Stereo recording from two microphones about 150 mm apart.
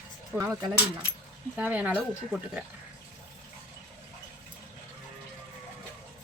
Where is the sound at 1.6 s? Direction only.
10° right (ahead or behind).